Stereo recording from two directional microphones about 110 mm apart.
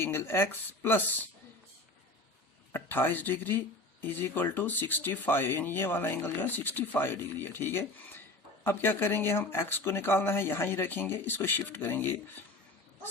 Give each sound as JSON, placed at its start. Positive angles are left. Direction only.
{"t": 0.0, "sound": "speech", "side_deg": 25}
{"t": 2.7, "sound": "speech", "side_deg": 20}